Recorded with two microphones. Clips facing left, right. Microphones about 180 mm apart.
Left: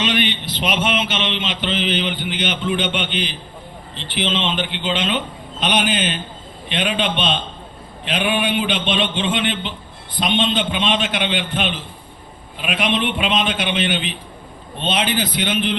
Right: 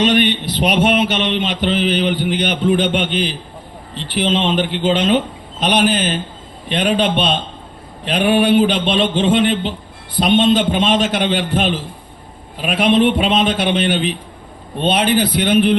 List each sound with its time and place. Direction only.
0.6 s mantra: 40° right (ahead or behind)
4.2 s a man's voice: 45° right (ahead or behind)
6.7 s mantra: 40° right (ahead or behind)
14.8 s a man's voice: 55° right (ahead or behind)